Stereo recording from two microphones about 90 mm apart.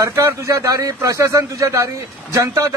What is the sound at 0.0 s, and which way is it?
A man's voice, 30° right (ahead or behind).